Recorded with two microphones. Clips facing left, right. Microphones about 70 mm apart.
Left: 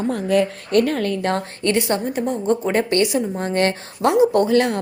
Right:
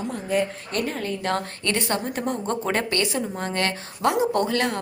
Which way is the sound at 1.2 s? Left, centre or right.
Left.